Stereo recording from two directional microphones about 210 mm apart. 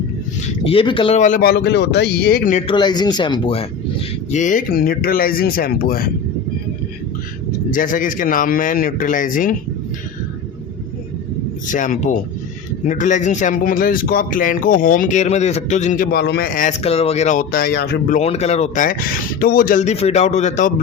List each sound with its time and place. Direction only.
0.6 s speech: 25° left (ahead or behind)
2.7 s speech: 20° left (ahead or behind); by 6.1 s 45° left (ahead or behind)
7.7 s speech: 40° left (ahead or behind)
11.7 s speech: 35° left (ahead or behind)
18.2 s speech: 30° left (ahead or behind)